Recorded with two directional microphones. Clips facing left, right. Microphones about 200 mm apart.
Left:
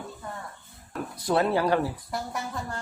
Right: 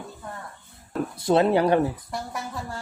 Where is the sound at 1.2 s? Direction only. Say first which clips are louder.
Right 4 dB; 25° right (ahead or behind).